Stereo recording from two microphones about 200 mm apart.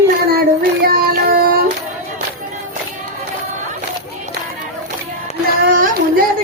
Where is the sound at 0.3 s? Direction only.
50° right (ahead or behind).